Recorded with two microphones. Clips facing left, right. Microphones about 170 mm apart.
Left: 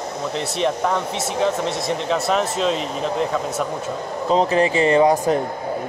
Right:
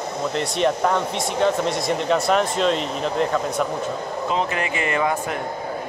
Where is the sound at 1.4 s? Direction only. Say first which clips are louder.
Right 1 dB; centre (ahead or behind).